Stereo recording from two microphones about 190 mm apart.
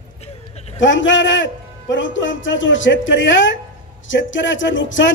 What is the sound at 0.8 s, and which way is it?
Speech, 80° left.